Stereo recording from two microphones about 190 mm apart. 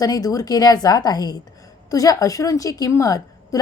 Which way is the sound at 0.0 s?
20° left (ahead or behind).